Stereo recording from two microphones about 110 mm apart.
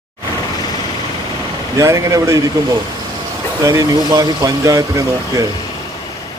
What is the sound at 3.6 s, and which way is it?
Speech, 30° right (ahead or behind).